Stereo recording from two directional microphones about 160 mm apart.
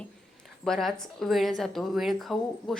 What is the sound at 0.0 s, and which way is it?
A woman's voice, 5° left (ahead or behind).